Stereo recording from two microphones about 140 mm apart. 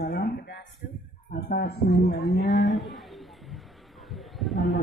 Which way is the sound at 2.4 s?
Centre (ahead or behind).